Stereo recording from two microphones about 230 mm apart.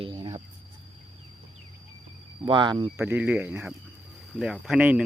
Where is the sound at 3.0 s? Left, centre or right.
Centre.